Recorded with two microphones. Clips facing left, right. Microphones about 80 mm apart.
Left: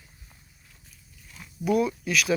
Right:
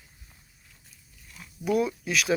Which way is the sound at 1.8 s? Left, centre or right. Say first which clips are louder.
Left 1 dB; right.